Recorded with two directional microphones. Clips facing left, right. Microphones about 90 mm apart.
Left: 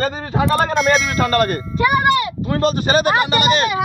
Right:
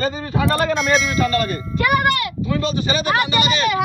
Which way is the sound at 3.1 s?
40° left (ahead or behind).